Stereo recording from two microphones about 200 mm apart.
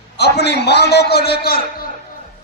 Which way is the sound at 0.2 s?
55° left (ahead or behind).